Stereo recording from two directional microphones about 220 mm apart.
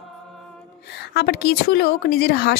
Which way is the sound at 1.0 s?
50° left (ahead or behind).